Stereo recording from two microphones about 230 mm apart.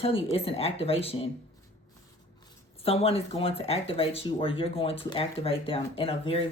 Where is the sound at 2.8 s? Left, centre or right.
Left.